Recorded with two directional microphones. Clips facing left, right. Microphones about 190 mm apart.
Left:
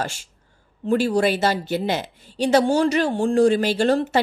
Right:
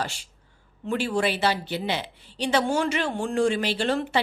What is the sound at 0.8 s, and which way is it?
A woman's voice, 40° left (ahead or behind).